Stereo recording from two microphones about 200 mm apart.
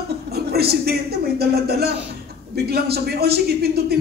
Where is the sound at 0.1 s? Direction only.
50° right (ahead or behind).